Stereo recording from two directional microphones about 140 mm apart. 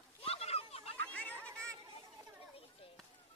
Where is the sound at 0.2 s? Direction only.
45° left (ahead or behind).